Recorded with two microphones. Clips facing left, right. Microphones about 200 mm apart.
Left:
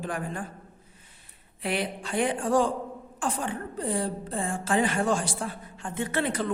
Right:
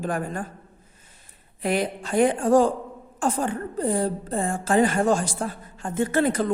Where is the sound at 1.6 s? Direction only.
45° right (ahead or behind).